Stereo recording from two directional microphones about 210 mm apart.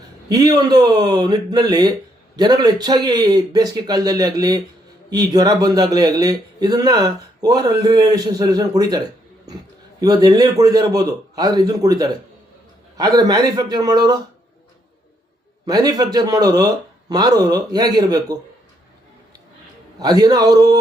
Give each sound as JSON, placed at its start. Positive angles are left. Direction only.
{"t": 0.3, "sound": "a man's voice", "side_deg": -20}
{"t": 10.0, "sound": "a man's voice", "side_deg": -20}
{"t": 15.6, "sound": "a man's voice", "side_deg": -15}
{"t": 20.0, "sound": "a man's voice", "side_deg": -20}